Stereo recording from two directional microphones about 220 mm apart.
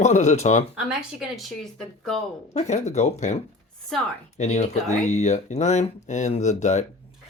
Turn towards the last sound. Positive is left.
turn(degrees=30)  # may be behind; listen again after turning